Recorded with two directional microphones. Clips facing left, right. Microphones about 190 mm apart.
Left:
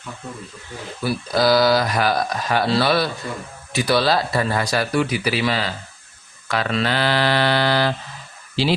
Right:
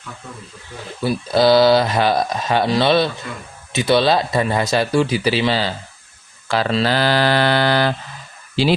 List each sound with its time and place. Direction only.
1.0 s speech: 25° right (ahead or behind); by 7.9 s 50° right (ahead or behind)